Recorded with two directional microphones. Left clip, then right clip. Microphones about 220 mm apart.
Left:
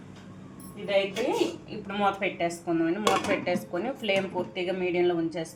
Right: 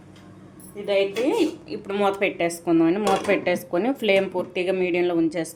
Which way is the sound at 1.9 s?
45° right (ahead or behind).